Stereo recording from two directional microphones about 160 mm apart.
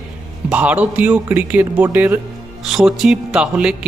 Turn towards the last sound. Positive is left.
turn(degrees=-5)  # may be behind; listen again after turning